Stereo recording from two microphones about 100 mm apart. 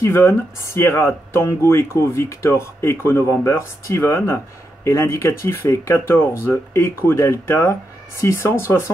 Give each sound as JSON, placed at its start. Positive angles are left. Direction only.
{"t": 0.0, "sound": "speech", "side_deg": 25}